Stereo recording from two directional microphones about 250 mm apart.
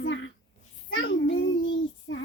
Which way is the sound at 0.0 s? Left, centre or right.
Left.